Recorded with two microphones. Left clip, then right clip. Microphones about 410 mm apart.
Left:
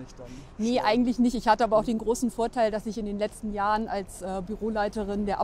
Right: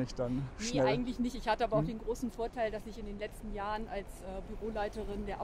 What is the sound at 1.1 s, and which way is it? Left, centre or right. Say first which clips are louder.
Speech: left 11 dB; left.